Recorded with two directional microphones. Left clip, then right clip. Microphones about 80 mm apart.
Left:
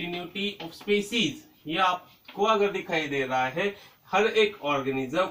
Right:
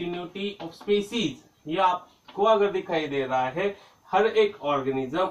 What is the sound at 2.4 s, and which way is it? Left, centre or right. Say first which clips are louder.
Speech: right 3 dB; centre.